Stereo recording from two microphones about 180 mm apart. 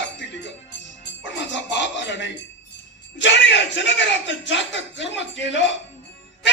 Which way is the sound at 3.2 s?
90° left.